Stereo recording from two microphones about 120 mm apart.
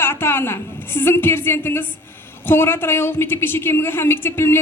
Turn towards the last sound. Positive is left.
turn(degrees=20)  # may be behind; listen again after turning